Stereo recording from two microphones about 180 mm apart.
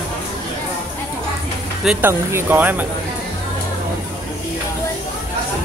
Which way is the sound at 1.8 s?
10° right (ahead or behind).